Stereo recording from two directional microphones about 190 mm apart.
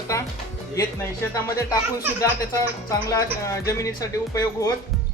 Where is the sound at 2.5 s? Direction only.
15° left (ahead or behind).